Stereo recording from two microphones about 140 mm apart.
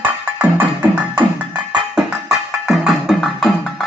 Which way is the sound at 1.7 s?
5° right (ahead or behind).